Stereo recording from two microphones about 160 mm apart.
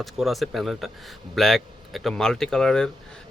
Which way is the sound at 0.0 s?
Centre (ahead or behind).